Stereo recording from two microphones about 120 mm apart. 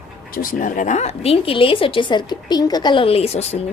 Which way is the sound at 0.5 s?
90° left.